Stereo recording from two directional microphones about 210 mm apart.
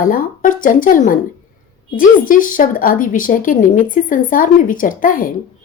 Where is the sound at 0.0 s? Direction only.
40° left (ahead or behind).